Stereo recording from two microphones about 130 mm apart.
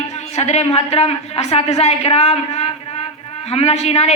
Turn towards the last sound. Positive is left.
turn(degrees=55)  # may be behind; listen again after turning